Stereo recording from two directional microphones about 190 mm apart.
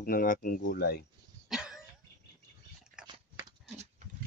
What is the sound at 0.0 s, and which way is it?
Speech, 50° left (ahead or behind).